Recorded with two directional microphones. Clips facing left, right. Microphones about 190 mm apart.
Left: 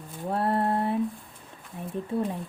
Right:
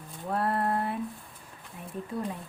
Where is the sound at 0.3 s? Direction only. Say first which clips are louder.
Left 3 dB; 25° left (ahead or behind).